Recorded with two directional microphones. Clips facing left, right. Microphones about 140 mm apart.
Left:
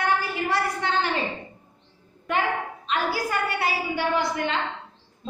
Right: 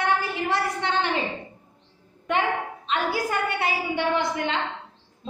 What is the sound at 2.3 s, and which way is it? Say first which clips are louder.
A woman's voice: right 1 dB; 25° right (ahead or behind).